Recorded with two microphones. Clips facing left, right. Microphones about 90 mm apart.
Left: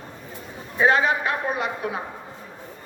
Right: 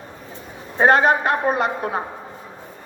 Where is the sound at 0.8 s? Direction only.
50° right (ahead or behind).